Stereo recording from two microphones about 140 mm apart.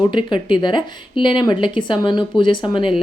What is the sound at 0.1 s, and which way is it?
Speech, 35° left (ahead or behind).